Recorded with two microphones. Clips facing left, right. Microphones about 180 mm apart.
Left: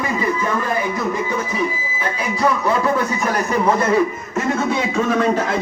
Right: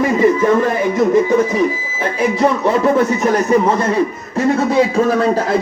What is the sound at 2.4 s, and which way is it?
Speech, 25° right (ahead or behind).